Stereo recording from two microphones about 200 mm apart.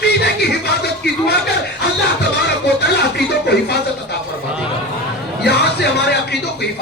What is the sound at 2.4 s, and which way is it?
Music, 55° left (ahead or behind).